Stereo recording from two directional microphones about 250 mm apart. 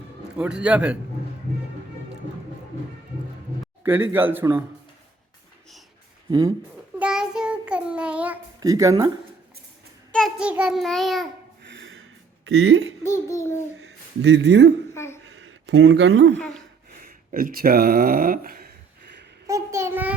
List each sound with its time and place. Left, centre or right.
0.3 s a sound: centre
3.8 s speech: centre
7.0 s child singing: centre
10.1 s a sound: centre
11.7 s gasp: right
12.5 s speech: right
13.0 s a child's voice: centre
13.8 s a man's voice: right
14.9 s a sound: centre
15.4 s speech: right
17.0 s speech: right
19.5 s speech: centre